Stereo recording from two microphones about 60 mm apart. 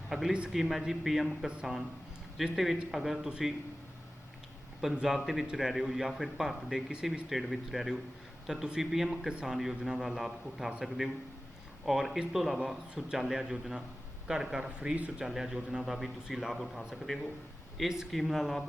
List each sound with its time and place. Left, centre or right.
0.1 s a man's voice: centre
4.8 s a man's voice: centre